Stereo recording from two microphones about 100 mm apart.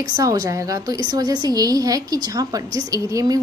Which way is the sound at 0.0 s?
35° right (ahead or behind).